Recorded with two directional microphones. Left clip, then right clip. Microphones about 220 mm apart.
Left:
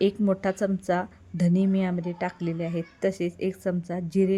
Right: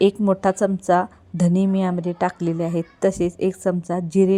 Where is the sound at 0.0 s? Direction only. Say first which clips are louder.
Right 7 dB; 10° right (ahead or behind).